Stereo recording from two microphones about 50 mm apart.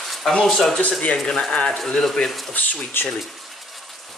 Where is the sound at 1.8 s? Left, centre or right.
Centre.